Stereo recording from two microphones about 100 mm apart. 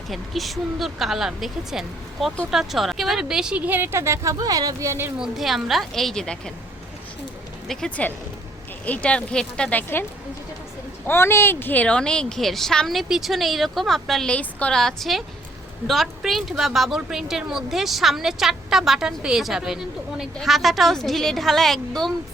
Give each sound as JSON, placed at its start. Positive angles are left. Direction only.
{"t": 0.1, "sound": "a woman's voice", "side_deg": 0}
{"t": 5.2, "sound": "a woman's voice", "side_deg": 0}
{"t": 7.7, "sound": "a woman's voice", "side_deg": 10}